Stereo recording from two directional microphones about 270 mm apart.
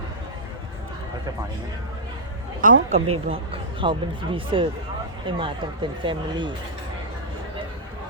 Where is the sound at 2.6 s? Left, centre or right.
Right.